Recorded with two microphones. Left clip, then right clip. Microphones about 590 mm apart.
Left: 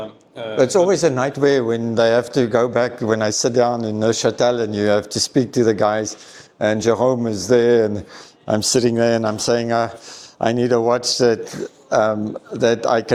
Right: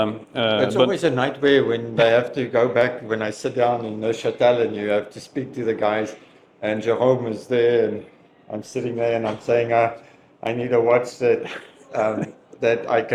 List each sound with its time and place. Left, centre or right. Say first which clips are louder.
0.7 s a man's voice: left 3 dB; left
8.5 s speech: left 9 dB; left
10.6 s speech: right 1 dB; left
11.9 s speech: left 5 dB; left